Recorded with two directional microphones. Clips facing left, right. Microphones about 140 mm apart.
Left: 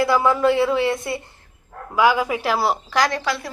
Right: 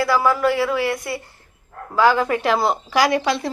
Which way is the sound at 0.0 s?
20° left (ahead or behind).